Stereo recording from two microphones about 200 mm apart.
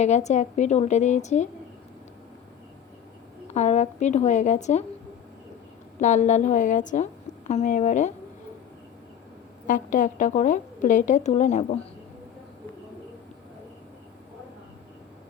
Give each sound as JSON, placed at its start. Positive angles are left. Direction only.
{"t": 0.0, "sound": "a woman's voice", "side_deg": 35}
{"t": 3.4, "sound": "a woman's voice", "side_deg": 35}
{"t": 6.0, "sound": "a woman's voice", "side_deg": 35}
{"t": 9.6, "sound": "a woman's voice", "side_deg": 40}